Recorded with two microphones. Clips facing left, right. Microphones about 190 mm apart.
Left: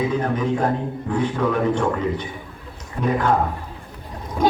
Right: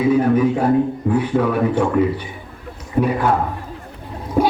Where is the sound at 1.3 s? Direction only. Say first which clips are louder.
Right 6 dB; 50° right (ahead or behind).